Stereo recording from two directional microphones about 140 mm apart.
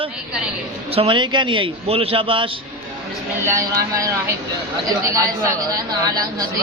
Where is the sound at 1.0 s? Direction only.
35° right (ahead or behind).